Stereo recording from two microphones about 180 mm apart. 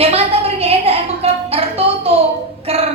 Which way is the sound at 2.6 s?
35° right (ahead or behind).